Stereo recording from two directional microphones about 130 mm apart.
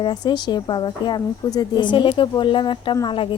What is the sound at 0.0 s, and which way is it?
A woman's voice, 35° left (ahead or behind).